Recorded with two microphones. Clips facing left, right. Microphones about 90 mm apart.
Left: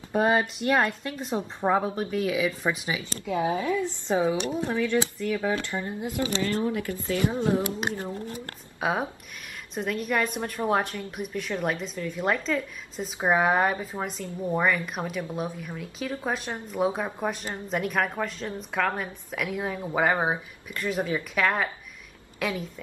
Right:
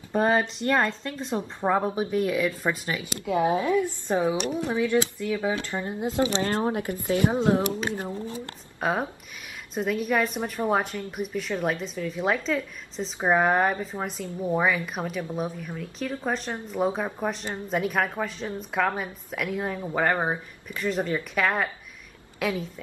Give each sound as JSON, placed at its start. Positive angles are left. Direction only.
{"t": 0.1, "sound": "a woman's voice", "side_deg": 5}
{"t": 3.0, "sound": "a woman's voice", "side_deg": -20}
{"t": 5.6, "sound": "a woman's voice", "side_deg": -25}
{"t": 8.7, "sound": "a woman's voice", "side_deg": 5}